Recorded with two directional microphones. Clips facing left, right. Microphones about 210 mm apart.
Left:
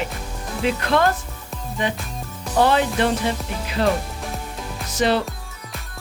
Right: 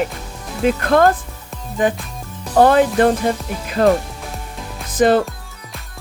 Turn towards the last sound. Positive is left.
turn(degrees=-50)  # may be behind; listen again after turning